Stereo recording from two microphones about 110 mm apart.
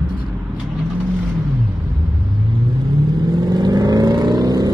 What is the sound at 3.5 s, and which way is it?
Vehicle, 40° right (ahead or behind).